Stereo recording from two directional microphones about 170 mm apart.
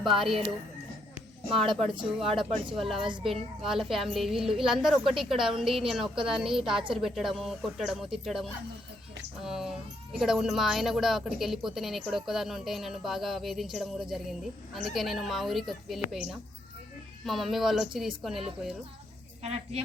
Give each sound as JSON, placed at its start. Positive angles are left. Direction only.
{"t": 0.2, "sound": "a woman's voice", "side_deg": 0}
{"t": 1.8, "sound": "speech", "side_deg": -30}
{"t": 2.0, "sound": "a woman's voice", "side_deg": 0}
{"t": 17.2, "sound": "a woman's voice", "side_deg": 0}
{"t": 19.4, "sound": "speech", "side_deg": -35}